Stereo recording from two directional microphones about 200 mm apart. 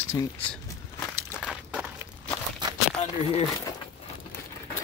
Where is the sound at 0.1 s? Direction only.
10° left (ahead or behind).